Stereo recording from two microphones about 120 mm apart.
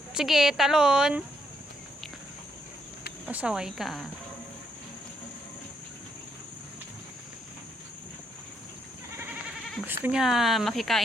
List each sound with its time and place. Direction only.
0.1 s speech: 5° right (ahead or behind)
3.2 s speech: 10° right (ahead or behind)
9.8 s speech: 15° right (ahead or behind)
10.2 s speech: centre (ahead or behind)